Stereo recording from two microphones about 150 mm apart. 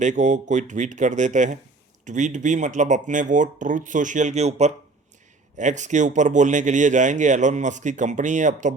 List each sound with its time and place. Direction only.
0.0 s speech: 55° right (ahead or behind)